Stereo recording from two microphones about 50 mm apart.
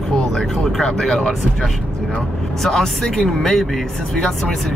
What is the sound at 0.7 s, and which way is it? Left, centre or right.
Speech, centre.